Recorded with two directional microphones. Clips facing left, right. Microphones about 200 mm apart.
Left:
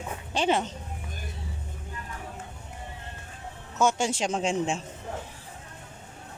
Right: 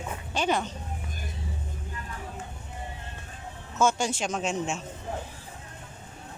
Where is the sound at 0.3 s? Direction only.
25° left (ahead or behind).